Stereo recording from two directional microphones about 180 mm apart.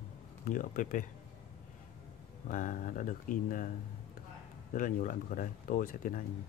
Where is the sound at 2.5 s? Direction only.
50° left (ahead or behind).